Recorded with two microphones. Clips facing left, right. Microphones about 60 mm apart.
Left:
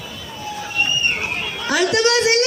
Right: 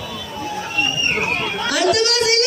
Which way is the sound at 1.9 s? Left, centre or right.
Left.